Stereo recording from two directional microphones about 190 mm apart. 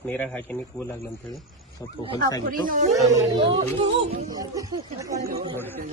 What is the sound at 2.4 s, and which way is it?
Speech, 45° right (ahead or behind).